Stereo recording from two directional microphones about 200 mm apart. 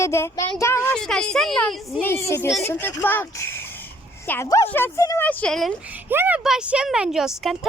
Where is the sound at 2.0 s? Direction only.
15° left (ahead or behind).